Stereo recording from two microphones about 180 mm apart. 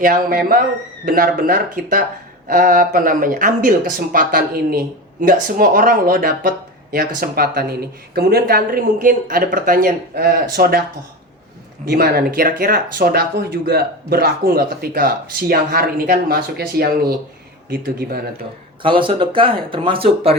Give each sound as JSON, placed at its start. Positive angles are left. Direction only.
{"t": 0.0, "sound": "speech", "side_deg": -50}
{"t": 11.9, "sound": "speech", "side_deg": -60}
{"t": 18.8, "sound": "speech", "side_deg": -30}